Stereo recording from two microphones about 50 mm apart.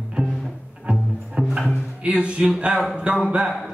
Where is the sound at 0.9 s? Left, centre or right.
Centre.